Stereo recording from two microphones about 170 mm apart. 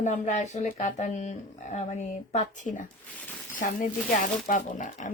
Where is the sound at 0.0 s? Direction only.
45° left (ahead or behind).